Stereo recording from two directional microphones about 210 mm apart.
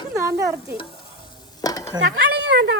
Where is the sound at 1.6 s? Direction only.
15° left (ahead or behind).